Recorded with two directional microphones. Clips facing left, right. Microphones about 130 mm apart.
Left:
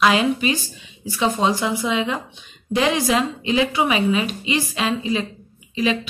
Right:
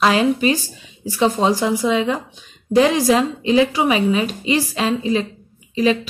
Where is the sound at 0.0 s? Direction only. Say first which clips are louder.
Right 2 dB; 35° right (ahead or behind).